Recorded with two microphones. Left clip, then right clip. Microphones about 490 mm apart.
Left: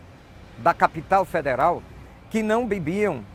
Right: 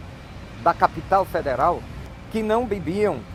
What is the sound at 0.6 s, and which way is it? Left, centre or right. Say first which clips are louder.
Speech: even; left.